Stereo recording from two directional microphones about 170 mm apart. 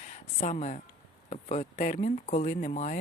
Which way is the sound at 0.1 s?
45° left (ahead or behind).